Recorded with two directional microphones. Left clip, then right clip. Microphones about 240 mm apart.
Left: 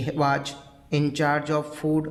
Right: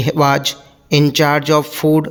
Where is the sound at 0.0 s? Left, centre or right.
Right.